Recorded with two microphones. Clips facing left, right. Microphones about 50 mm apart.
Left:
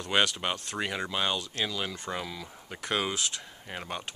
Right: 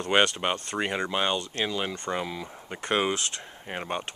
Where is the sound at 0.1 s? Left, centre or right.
Right.